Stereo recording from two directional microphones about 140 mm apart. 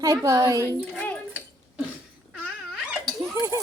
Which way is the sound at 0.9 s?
10° left (ahead or behind).